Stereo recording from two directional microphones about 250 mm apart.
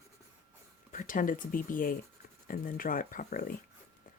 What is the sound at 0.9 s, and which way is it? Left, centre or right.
Speech, left.